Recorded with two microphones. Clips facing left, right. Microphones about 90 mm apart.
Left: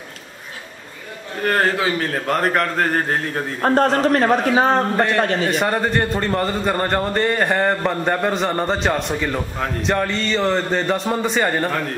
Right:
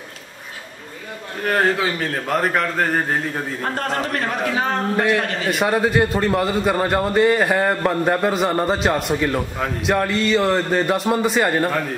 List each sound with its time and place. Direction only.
1.4 s a man's voice: centre (ahead or behind)
3.6 s a man's voice: 35° left (ahead or behind)
5.5 s a man's voice: 5° right (ahead or behind)